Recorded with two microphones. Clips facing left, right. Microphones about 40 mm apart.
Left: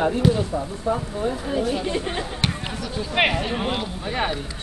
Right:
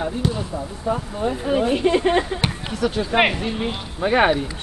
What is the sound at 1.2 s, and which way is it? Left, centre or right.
Speech, right.